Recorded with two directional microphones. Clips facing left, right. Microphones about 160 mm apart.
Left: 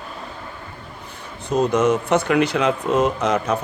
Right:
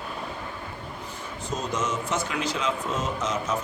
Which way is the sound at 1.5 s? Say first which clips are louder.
Left 12 dB; 60° left (ahead or behind).